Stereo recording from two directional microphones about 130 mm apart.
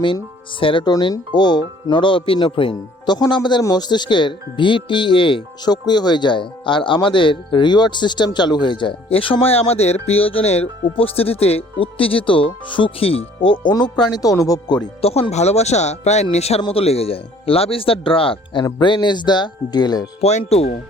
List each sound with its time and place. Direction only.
0.6 s speech: 40° left (ahead or behind)
15.0 s speech: 50° left (ahead or behind); by 20.1 s 30° left (ahead or behind)
20.4 s speech: 50° left (ahead or behind)